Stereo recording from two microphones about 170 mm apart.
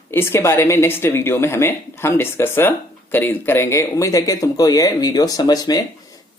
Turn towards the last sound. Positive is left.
turn(degrees=25)  # may be behind; listen again after turning